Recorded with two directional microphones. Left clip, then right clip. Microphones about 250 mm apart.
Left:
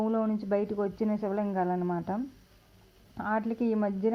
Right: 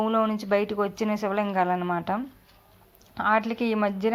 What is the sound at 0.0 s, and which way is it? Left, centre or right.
Speech, right.